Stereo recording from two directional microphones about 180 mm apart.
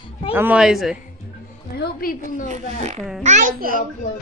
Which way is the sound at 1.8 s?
55° left (ahead or behind).